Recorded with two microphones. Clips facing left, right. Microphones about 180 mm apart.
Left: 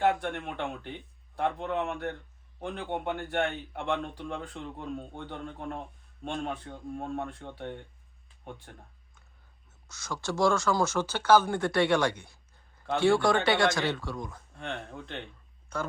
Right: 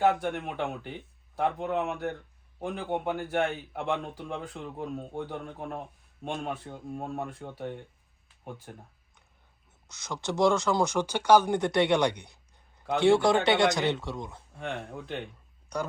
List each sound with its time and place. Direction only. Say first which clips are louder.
0.0 s speech: right 2 dB; centre (ahead or behind)
9.9 s speech: right 1 dB; 20° right (ahead or behind)
14.5 s speech: right 3 dB; 5° right (ahead or behind)